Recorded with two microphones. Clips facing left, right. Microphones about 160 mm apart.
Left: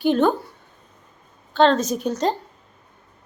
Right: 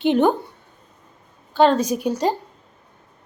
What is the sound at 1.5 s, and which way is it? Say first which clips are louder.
Speech: right 1 dB; 10° right (ahead or behind).